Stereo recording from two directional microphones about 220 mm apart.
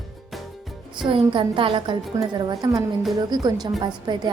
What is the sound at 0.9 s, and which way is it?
A woman's voice, 20° right (ahead or behind).